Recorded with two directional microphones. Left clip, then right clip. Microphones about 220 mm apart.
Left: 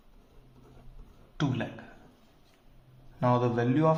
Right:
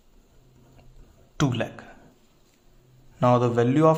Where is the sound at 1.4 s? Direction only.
45° right (ahead or behind).